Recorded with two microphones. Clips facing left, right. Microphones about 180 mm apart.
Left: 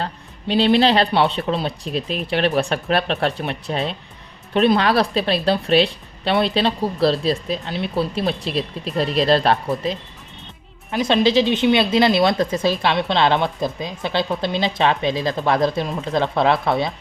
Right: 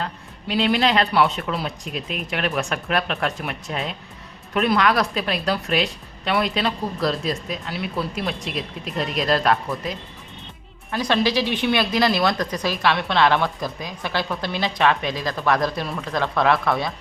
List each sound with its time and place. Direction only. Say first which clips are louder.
0.0 s a woman's voice: left 3 dB; 30° left (ahead or behind)